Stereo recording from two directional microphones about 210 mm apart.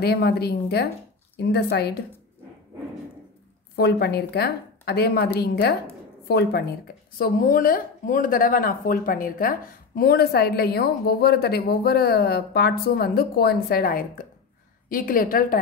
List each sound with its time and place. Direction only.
0.0 s speech: 50° left (ahead or behind)
3.7 s speech: 50° left (ahead or behind)